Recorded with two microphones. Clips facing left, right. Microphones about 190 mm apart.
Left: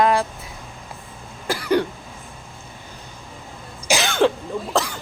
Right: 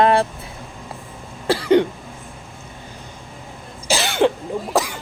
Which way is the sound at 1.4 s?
30° right (ahead or behind).